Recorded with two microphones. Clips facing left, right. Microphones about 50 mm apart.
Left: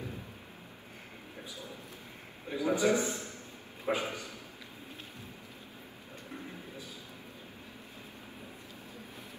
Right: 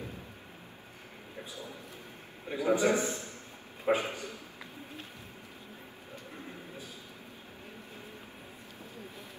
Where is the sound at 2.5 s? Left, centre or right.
Right.